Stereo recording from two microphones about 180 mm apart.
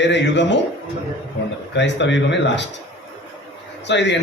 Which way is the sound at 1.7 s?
80° left.